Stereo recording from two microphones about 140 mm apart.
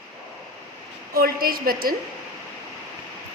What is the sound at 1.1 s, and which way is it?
Speech, 90° right.